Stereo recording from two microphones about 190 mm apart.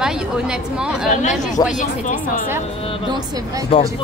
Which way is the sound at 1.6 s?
20° left (ahead or behind).